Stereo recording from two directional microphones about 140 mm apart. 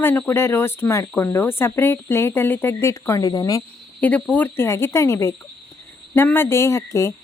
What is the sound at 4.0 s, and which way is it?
A woman's voice, 10° left (ahead or behind).